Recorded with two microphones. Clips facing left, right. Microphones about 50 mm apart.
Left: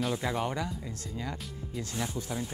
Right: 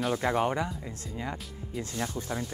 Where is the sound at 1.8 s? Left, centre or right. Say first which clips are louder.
Right 1 dB; right.